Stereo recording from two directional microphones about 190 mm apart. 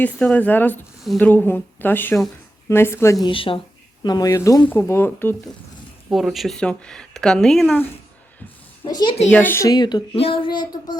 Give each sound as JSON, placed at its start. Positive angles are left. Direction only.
{"t": 0.0, "sound": "speech", "side_deg": 5}
{"t": 6.1, "sound": "speech", "side_deg": 0}
{"t": 8.8, "sound": "speech", "side_deg": 25}
{"t": 9.3, "sound": "a child's voice", "side_deg": 10}